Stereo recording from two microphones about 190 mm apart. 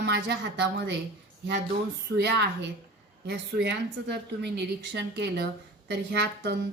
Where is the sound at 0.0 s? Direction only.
65° right (ahead or behind).